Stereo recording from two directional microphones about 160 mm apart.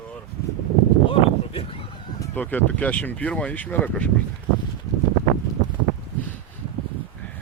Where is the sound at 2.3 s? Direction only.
10° left (ahead or behind).